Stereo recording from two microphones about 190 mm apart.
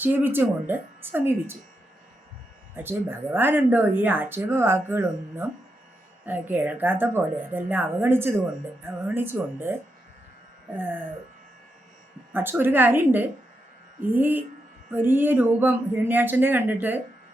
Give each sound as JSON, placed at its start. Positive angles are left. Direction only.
{"t": 0.0, "sound": "speech", "side_deg": -10}
{"t": 2.7, "sound": "speech", "side_deg": -10}
{"t": 12.3, "sound": "speech", "side_deg": -10}